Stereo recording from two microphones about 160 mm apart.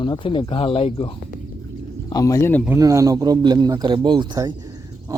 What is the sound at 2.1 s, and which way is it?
Speech, 20° left (ahead or behind).